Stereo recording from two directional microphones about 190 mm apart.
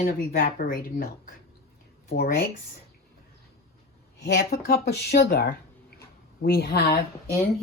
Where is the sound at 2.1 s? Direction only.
50° left (ahead or behind).